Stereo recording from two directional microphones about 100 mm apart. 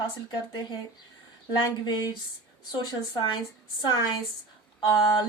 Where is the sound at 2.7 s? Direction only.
50° left (ahead or behind).